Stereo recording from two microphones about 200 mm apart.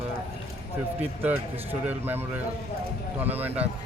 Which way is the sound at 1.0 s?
10° right (ahead or behind).